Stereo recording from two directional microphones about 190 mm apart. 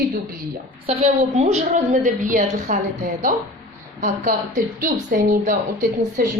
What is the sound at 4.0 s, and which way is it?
A woman's voice, 45° right (ahead or behind).